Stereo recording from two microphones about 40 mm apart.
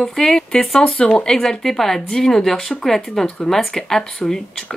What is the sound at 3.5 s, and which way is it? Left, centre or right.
Speech, centre.